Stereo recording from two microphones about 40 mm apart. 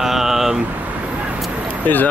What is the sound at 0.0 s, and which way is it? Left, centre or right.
Vehicle, centre.